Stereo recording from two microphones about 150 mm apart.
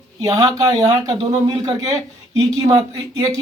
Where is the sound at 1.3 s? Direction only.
35° right (ahead or behind).